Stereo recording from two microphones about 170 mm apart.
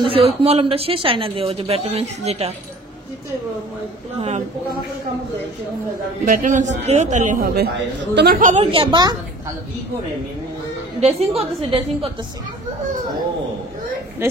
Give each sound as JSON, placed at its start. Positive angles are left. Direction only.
{"t": 0.0, "sound": "a woman's voice", "side_deg": -35}
{"t": 6.2, "sound": "a man's voice", "side_deg": -55}
{"t": 8.4, "sound": "a man's voice", "side_deg": -45}
{"t": 8.7, "sound": "a woman's voice", "side_deg": -25}
{"t": 11.1, "sound": "a woman's voice", "side_deg": -35}